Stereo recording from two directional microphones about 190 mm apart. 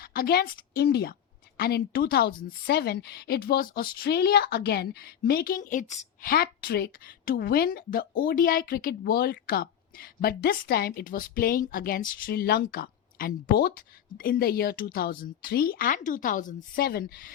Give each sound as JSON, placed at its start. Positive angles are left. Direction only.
{"t": 0.0, "sound": "a woman's voice", "side_deg": 50}